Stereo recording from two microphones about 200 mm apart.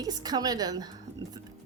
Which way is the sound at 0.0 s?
20° right (ahead or behind).